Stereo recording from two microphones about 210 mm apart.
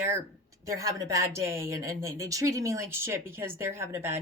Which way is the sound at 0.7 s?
15° right (ahead or behind).